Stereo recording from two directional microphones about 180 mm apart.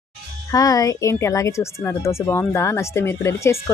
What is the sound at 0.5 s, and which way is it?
A woman's voice, 20° left (ahead or behind).